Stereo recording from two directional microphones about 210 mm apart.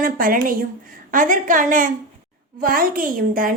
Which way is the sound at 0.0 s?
40° right (ahead or behind).